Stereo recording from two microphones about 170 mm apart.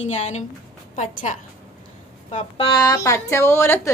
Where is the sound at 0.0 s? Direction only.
45° left (ahead or behind).